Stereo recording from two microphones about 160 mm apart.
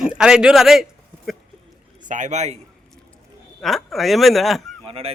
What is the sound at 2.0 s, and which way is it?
Speech, 50° right (ahead or behind).